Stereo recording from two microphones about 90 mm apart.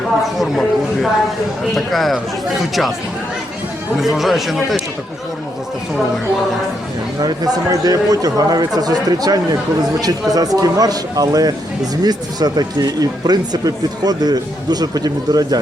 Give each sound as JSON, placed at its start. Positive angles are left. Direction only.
{"t": 0.3, "sound": "speech", "side_deg": 0}
{"t": 3.9, "sound": "speech", "side_deg": 0}
{"t": 7.2, "sound": "speech", "side_deg": -45}